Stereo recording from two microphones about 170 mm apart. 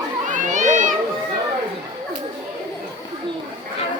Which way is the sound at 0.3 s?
45° right (ahead or behind).